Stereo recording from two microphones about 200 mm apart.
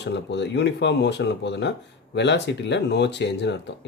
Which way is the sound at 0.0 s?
60° left (ahead or behind).